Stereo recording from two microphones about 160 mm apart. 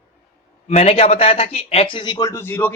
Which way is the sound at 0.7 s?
40° left (ahead or behind).